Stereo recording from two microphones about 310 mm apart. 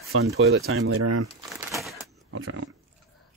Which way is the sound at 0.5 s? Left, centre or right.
Right.